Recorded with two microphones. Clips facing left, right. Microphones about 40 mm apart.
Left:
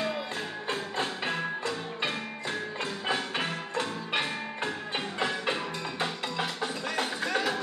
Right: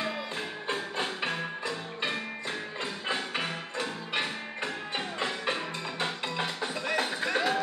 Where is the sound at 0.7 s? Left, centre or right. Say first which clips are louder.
Even; centre.